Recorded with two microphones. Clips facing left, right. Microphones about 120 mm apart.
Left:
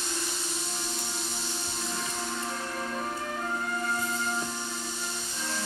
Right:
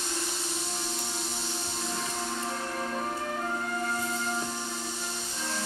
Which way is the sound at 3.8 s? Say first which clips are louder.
Left 1 dB; 40° right (ahead or behind).